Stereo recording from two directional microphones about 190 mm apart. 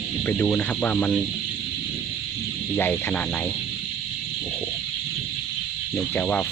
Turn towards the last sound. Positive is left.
turn(degrees=5)  # may be behind; listen again after turning